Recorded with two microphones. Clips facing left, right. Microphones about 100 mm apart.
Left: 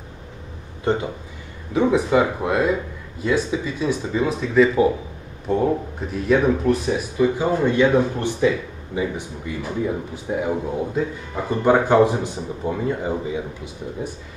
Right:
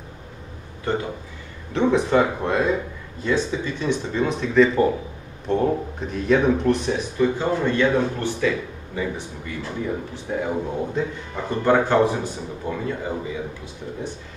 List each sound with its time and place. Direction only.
1.7 s speech: 10° left (ahead or behind)